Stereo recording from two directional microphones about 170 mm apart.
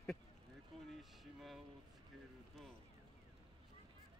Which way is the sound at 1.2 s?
Centre (ahead or behind).